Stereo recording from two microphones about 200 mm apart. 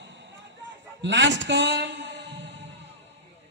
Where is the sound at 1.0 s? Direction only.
65° right (ahead or behind).